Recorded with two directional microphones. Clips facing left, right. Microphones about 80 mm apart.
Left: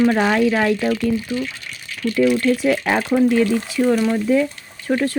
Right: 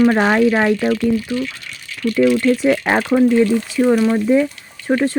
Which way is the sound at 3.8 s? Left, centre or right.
Right.